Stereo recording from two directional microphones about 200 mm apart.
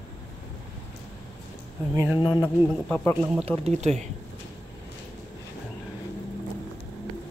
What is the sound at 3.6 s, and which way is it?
Speech, 35° right (ahead or behind).